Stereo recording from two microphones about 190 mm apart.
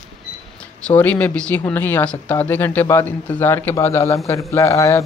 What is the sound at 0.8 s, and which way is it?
Speech, 10° left (ahead or behind).